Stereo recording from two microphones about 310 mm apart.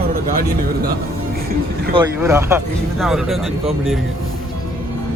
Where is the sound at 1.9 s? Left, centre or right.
Centre.